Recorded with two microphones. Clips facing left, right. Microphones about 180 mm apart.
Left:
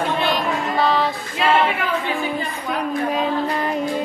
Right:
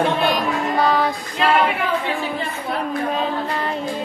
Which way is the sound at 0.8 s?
Centre (ahead or behind).